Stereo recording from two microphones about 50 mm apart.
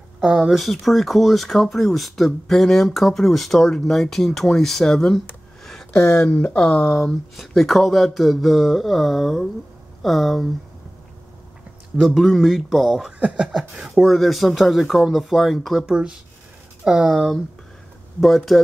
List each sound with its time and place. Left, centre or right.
0.2 s speech: centre
0.6 s speech: centre
5.6 s a sound: centre
6.1 s speech: centre
7.3 s speech: centre
12.0 s speech: centre
15.9 s speech: centre